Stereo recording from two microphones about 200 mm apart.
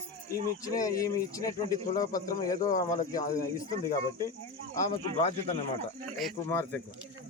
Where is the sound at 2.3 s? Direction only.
15° left (ahead or behind).